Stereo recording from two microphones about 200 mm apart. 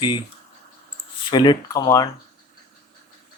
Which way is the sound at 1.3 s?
20° left (ahead or behind).